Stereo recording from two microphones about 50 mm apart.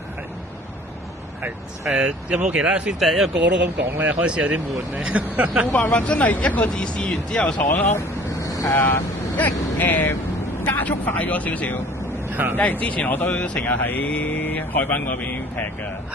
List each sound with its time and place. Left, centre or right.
1.9 s speech: right
3.0 s speech: centre
4.0 s speech: right
5.9 s speech: left
7.6 s speech: left
12.3 s speech: right
12.5 s speech: left